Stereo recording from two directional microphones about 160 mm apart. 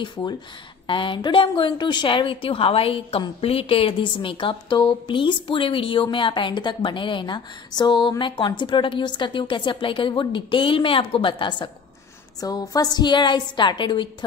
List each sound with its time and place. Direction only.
0.0 s a woman's voice: 25° left (ahead or behind)